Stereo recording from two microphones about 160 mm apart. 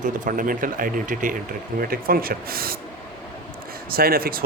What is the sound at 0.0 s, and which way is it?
Speech, 55° right (ahead or behind).